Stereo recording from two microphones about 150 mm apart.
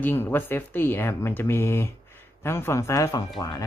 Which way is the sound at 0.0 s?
15° left (ahead or behind).